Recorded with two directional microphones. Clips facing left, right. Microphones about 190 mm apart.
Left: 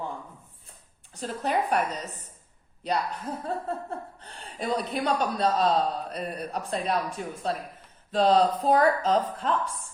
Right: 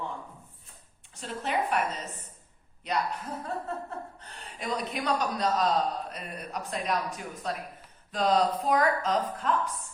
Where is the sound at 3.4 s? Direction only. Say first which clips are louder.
Left 4 dB; 30° left (ahead or behind).